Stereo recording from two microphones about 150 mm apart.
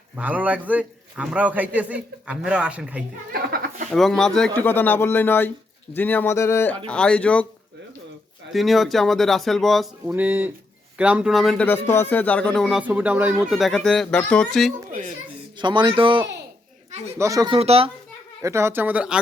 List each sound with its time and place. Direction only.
0.2 s a man's voice: 10° right (ahead or behind)
3.3 s a sound: 85° right
3.9 s speech: 5° left (ahead or behind)
8.5 s speech: centre (ahead or behind)
10.1 s a man's voice: 10° right (ahead or behind)
11.6 s speech: 15° left (ahead or behind)
12.8 s speech: 10° right (ahead or behind)
15.5 s speech: 30° right (ahead or behind)
17.2 s speech: 20° right (ahead or behind)
17.5 s speech: 40° right (ahead or behind)
18.4 s a man's voice: 15° right (ahead or behind)